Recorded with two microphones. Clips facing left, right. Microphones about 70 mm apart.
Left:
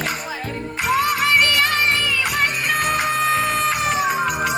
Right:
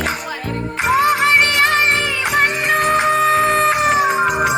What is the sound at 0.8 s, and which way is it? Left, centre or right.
Music, right.